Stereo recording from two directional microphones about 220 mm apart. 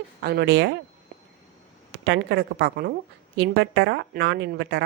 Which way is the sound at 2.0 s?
50° right (ahead or behind).